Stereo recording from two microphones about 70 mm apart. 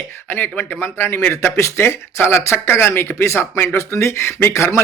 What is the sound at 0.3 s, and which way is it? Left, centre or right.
A man's voice, left.